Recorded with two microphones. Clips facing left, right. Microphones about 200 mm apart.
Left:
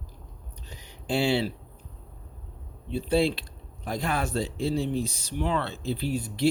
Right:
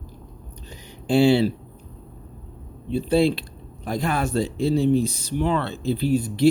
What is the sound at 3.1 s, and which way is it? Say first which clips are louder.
Speech: right 4 dB; 45° right (ahead or behind).